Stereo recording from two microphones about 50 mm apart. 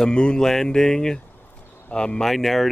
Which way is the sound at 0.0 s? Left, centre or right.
Centre.